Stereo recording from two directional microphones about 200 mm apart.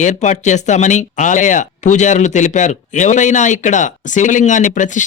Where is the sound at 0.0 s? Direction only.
35° left (ahead or behind).